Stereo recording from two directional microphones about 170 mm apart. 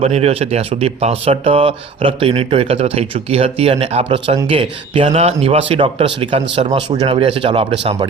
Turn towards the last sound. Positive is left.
turn(degrees=-30)  # may be behind; listen again after turning